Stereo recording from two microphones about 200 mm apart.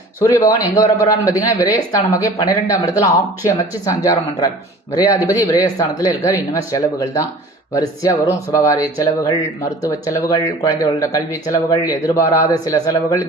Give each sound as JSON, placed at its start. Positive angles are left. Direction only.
{"t": 0.3, "sound": "speech", "side_deg": 15}